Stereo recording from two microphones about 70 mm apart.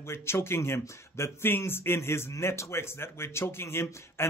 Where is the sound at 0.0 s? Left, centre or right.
Left.